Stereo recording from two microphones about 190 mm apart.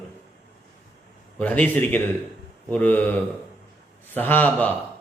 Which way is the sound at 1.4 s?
5° left (ahead or behind).